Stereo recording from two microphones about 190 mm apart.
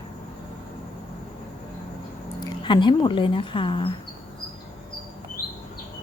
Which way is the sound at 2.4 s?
25° left (ahead or behind).